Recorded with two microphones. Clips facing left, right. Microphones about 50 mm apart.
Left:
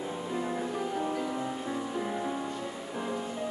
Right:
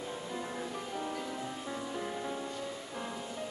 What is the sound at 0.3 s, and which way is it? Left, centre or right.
Music, centre.